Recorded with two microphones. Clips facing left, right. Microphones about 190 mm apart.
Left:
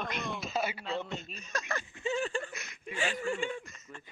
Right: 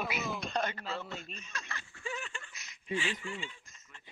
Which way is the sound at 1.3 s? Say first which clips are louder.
Left 9 dB; 40° left (ahead or behind).